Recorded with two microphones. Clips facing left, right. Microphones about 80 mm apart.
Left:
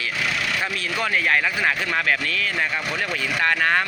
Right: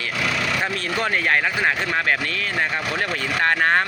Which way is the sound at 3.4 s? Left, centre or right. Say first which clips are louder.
Right 2 dB; right.